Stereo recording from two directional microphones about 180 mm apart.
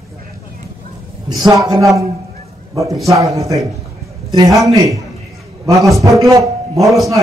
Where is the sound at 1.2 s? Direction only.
20° right (ahead or behind).